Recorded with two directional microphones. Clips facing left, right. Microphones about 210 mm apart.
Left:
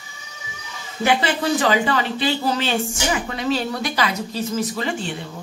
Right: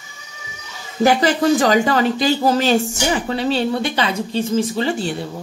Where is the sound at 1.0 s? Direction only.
40° right (ahead or behind).